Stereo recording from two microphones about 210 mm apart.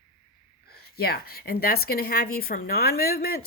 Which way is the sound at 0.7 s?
50° left (ahead or behind).